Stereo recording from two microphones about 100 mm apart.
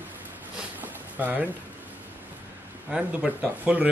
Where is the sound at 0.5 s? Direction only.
15° right (ahead or behind).